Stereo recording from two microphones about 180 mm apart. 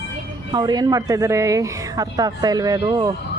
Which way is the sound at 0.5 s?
20° right (ahead or behind).